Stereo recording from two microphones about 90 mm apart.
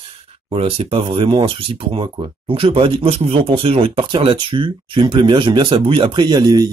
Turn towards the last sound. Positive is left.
turn(degrees=-45)  # may be behind; listen again after turning